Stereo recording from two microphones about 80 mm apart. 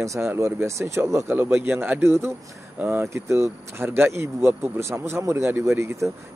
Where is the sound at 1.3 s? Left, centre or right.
Right.